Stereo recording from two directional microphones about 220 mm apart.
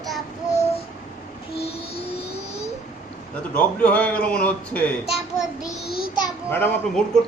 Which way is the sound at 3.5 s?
5° left (ahead or behind).